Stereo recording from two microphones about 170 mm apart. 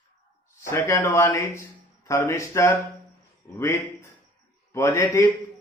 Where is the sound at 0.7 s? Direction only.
15° left (ahead or behind).